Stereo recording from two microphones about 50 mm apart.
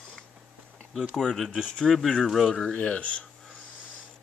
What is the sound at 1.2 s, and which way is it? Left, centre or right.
Speech, centre.